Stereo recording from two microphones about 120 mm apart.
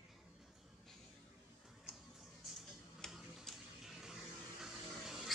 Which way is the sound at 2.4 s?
Centre (ahead or behind).